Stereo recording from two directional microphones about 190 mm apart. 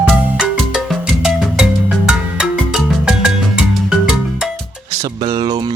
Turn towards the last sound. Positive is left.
turn(degrees=-20)  # may be behind; listen again after turning